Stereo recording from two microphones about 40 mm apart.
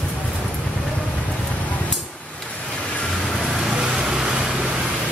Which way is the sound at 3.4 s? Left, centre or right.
Centre.